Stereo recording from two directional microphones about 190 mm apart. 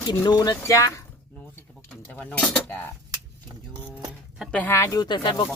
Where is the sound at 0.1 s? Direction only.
20° left (ahead or behind).